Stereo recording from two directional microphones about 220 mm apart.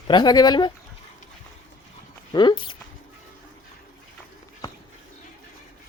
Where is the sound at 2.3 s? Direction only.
20° left (ahead or behind).